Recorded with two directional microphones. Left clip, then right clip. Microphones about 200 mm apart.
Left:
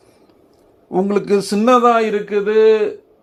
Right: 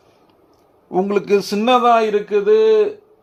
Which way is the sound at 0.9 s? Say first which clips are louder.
Even; 15° left (ahead or behind).